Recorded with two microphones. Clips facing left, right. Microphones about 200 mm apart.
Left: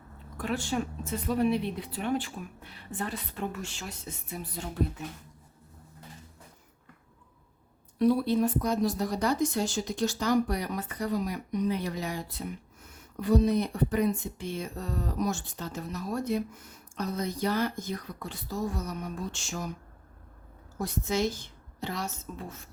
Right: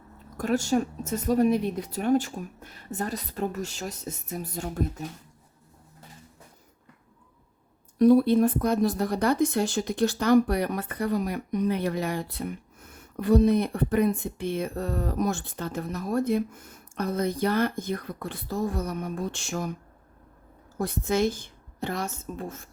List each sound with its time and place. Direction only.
0.3 s speech: 45° right (ahead or behind)
7.9 s speech: 50° right (ahead or behind)
20.7 s speech: 55° right (ahead or behind)